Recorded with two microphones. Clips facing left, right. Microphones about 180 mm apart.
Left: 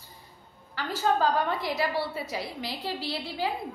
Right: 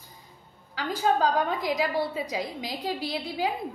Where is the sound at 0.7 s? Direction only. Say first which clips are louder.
Right 1 dB; 15° right (ahead or behind).